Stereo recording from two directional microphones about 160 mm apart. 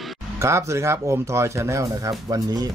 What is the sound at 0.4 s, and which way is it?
Speech, 15° right (ahead or behind).